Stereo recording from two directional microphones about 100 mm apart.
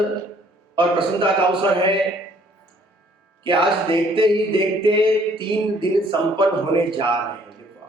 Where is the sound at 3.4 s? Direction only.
60° right (ahead or behind).